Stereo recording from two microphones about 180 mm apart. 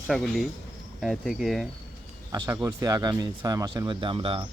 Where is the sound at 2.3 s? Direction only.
20° right (ahead or behind).